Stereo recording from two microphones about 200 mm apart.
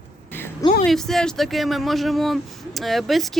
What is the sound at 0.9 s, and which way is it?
Speech, centre (ahead or behind).